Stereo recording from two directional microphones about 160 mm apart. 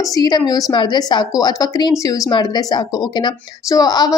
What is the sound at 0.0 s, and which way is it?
A woman's voice, 25° left (ahead or behind).